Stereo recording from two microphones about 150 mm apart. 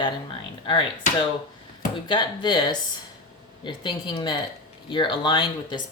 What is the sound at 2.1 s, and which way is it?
Speech, 30° left (ahead or behind).